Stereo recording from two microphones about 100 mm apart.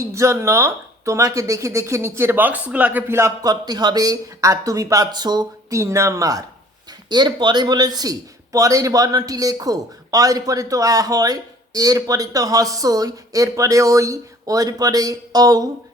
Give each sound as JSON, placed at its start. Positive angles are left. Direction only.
{"t": 0.0, "sound": "speech", "side_deg": -30}
{"t": 3.4, "sound": "a man's voice", "side_deg": -45}
{"t": 5.8, "sound": "a man's voice", "side_deg": -30}
{"t": 7.1, "sound": "a man's voice", "side_deg": -45}